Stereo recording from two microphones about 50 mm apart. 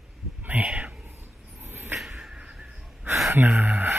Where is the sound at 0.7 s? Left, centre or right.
Centre.